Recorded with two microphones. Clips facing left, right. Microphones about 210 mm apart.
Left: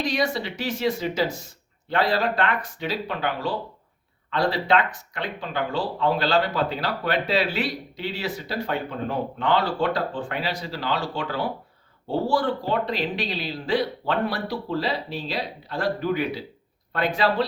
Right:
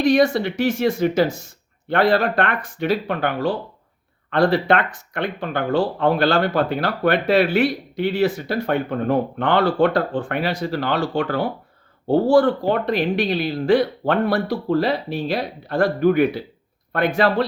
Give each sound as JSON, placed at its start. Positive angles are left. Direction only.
{"t": 0.0, "sound": "speech", "side_deg": -50}